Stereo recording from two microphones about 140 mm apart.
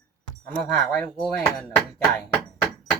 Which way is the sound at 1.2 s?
5° left (ahead or behind).